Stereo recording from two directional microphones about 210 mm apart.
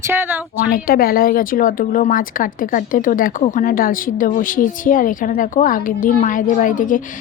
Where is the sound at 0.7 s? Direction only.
45° left (ahead or behind).